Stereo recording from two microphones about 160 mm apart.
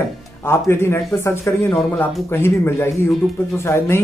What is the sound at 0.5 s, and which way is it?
Speech, 15° left (ahead or behind).